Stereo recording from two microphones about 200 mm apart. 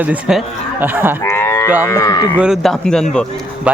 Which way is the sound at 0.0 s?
5° right (ahead or behind).